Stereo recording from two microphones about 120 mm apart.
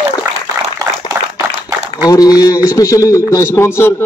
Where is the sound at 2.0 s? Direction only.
30° left (ahead or behind).